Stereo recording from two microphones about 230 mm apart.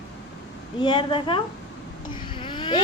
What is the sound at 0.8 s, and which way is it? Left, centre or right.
Speech, left.